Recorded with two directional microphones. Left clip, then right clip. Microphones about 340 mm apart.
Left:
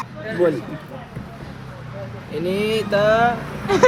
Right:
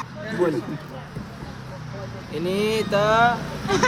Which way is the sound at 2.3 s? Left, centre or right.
Centre.